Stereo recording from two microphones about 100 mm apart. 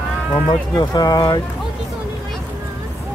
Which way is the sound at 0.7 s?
40° left (ahead or behind).